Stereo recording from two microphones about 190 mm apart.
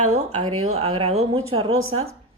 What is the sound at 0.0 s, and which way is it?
Speech, 35° right (ahead or behind).